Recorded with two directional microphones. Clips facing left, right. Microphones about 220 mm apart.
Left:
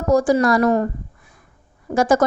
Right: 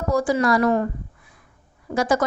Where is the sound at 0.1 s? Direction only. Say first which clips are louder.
Left 4 dB; 45° left (ahead or behind).